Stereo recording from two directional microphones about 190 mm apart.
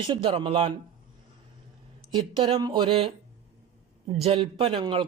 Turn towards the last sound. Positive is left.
turn(degrees=-25)  # may be behind; listen again after turning